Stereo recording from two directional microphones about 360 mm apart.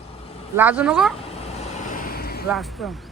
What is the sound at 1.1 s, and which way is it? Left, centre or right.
Vehicle, centre.